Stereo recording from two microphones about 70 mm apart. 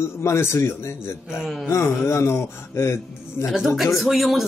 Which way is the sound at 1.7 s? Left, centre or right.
Left.